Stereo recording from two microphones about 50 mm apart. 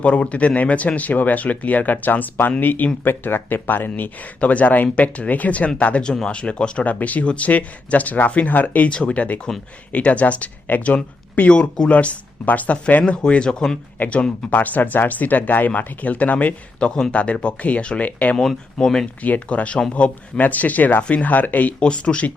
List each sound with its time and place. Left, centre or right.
0.0 s speech: left
6.8 s speech: left
14.5 s speech: left
18.3 s speech: centre
19.2 s speech: left
21.8 s speech: left